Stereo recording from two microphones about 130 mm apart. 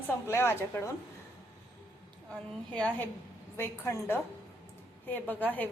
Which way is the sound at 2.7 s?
10° left (ahead or behind).